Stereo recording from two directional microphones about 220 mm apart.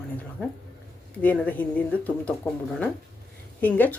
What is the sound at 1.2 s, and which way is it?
Speech, 5° left (ahead or behind).